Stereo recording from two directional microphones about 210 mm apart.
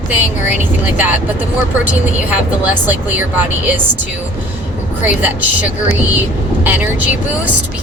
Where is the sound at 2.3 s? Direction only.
10° right (ahead or behind).